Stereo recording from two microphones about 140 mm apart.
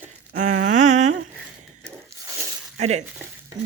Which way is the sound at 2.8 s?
55° right (ahead or behind).